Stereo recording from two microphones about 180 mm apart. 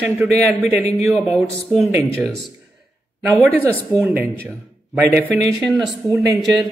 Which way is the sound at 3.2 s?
15° right (ahead or behind).